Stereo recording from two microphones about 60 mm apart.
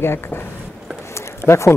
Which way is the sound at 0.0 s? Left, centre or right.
Left.